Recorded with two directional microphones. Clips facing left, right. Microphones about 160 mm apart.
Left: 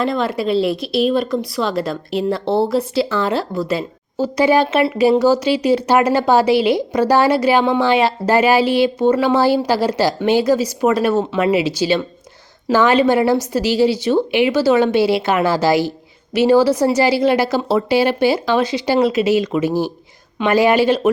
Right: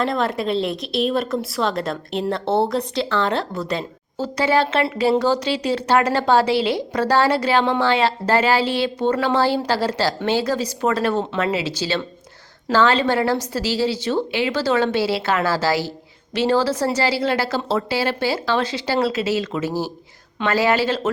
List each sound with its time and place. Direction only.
0.0 s speech: centre (ahead or behind)